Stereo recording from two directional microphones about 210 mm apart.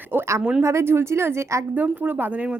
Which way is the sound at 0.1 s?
10° right (ahead or behind).